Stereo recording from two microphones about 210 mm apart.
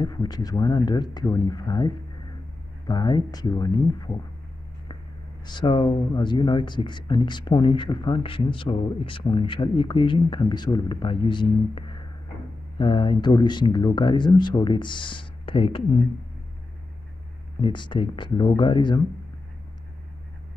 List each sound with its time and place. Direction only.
0.0 s speech: 20° left (ahead or behind)
2.9 s speech: 20° left (ahead or behind)
5.4 s speech: 20° left (ahead or behind)
17.6 s speech: 25° left (ahead or behind)